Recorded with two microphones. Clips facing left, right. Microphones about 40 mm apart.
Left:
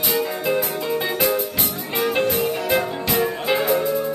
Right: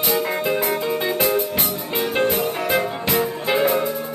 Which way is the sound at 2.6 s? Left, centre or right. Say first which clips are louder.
Even; centre.